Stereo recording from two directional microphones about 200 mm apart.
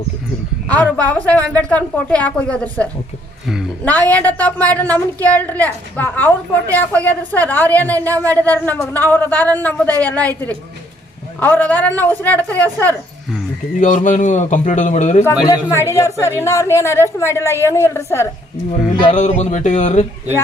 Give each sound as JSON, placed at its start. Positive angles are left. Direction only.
{"t": 0.7, "sound": "a woman's voice", "side_deg": 5}
{"t": 13.8, "sound": "a man's voice", "side_deg": 40}
{"t": 15.9, "sound": "a woman's voice", "side_deg": 15}
{"t": 19.0, "sound": "a man's voice", "side_deg": 35}